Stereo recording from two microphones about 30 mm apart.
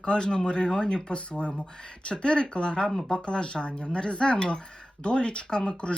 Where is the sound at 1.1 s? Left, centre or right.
Left.